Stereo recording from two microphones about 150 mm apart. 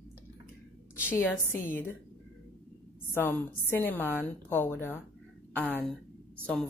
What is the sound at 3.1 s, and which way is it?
A woman's voice, 15° left (ahead or behind).